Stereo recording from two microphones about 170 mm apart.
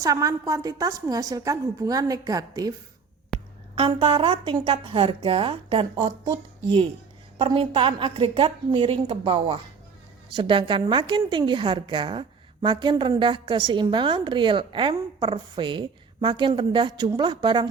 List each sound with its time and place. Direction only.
0.0 s a woman's voice: 20° right (ahead or behind)
3.8 s a woman's voice: 30° right (ahead or behind)
7.3 s a woman's voice: 30° right (ahead or behind)